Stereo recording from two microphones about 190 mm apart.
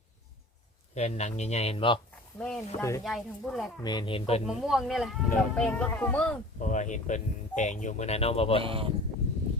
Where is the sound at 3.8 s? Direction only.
20° left (ahead or behind).